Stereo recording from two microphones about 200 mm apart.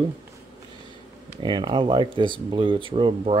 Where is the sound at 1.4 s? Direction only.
25° right (ahead or behind).